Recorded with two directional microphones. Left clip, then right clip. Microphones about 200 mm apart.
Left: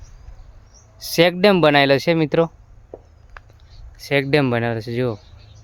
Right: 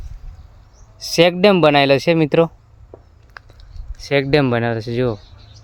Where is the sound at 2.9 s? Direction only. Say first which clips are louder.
Left 3 dB; 50° left (ahead or behind).